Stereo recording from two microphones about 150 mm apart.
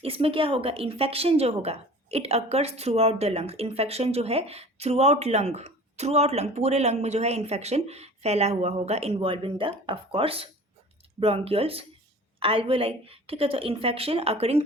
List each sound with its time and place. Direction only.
0.0 s a woman's voice: 40° right (ahead or behind)